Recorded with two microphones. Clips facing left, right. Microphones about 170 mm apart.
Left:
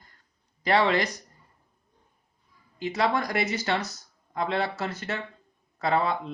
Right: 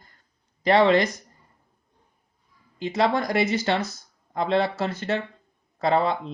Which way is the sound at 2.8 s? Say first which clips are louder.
Right 3 dB; 25° right (ahead or behind).